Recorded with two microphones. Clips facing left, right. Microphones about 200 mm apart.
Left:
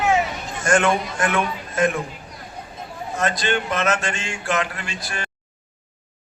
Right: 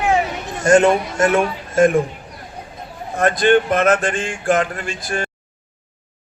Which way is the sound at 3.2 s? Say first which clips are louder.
Right 9 dB; 55° right (ahead or behind).